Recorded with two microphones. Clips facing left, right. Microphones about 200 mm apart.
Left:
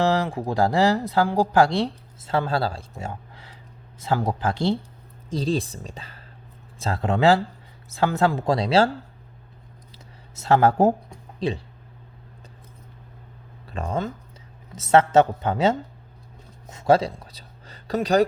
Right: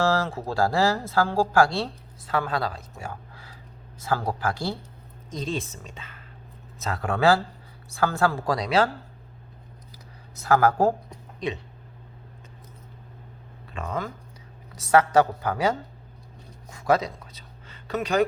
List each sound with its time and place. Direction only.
0.0 s speech: 15° left (ahead or behind)
5.3 s speech: 35° left (ahead or behind)
9.9 s a sound: 25° left (ahead or behind)
11.3 s speech: 30° left (ahead or behind)
13.7 s speech: 30° left (ahead or behind)
16.6 s a sound: 25° left (ahead or behind)